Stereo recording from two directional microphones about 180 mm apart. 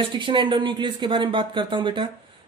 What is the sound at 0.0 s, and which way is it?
Speech, 25° right (ahead or behind).